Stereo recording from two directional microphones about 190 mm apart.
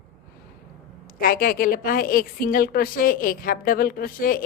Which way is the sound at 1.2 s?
50° left (ahead or behind).